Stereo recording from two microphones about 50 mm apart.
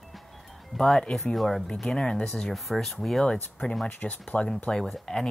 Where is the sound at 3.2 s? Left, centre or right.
Centre.